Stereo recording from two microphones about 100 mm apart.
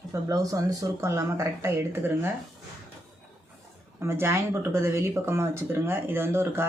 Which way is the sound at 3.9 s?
25° right (ahead or behind).